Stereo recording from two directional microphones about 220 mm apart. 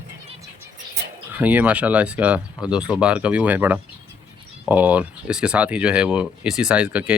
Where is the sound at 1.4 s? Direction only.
5° right (ahead or behind).